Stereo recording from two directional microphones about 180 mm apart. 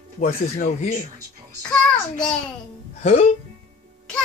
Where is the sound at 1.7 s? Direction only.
5° left (ahead or behind).